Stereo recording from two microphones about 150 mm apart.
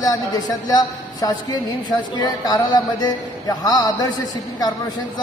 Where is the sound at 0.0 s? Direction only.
25° left (ahead or behind).